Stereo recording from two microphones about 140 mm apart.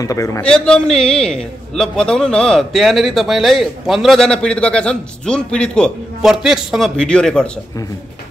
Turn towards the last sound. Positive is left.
turn(degrees=5)  # may be behind; listen again after turning